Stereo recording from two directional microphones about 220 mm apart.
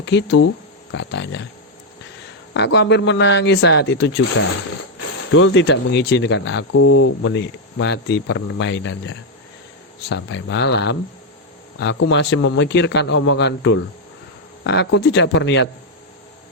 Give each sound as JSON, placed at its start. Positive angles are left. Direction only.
{"t": 0.0, "sound": "speech", "side_deg": 50}
{"t": 2.5, "sound": "a man's voice", "side_deg": 55}
{"t": 6.7, "sound": "a man's voice", "side_deg": 65}